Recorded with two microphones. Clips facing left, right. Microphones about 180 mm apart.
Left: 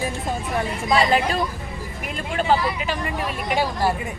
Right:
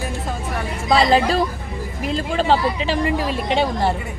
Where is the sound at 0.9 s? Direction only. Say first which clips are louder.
Right 4 dB; 30° right (ahead or behind).